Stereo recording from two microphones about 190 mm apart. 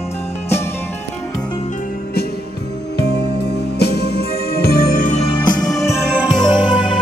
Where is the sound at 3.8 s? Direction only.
55° left (ahead or behind); by 5.5 s 30° left (ahead or behind).